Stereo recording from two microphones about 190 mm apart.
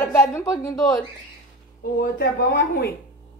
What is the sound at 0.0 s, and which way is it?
A woman's voice, 15° left (ahead or behind).